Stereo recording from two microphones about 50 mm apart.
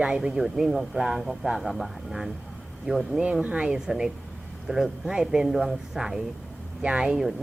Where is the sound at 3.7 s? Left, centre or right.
Centre.